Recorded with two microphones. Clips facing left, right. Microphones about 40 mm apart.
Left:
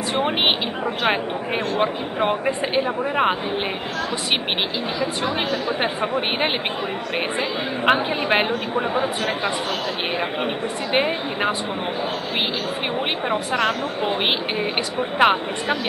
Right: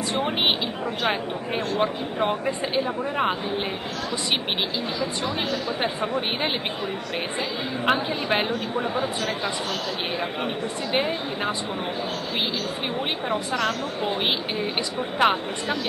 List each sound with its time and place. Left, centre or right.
0.1 s speech: left
5.2 s speech: left
7.8 s speech: left
10.4 s speech: left
13.3 s speech: left